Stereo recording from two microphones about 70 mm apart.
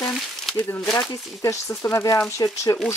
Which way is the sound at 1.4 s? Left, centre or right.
Left.